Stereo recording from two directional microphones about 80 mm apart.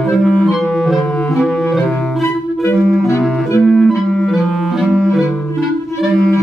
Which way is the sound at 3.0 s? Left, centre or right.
Left.